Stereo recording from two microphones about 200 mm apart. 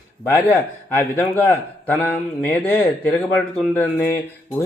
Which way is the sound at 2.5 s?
5° left (ahead or behind).